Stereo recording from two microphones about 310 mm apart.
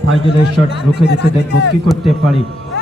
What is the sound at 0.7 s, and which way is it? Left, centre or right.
Speech, left.